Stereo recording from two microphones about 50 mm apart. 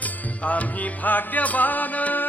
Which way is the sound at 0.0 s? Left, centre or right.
Left.